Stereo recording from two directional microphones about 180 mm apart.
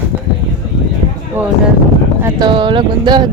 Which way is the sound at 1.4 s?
10° right (ahead or behind).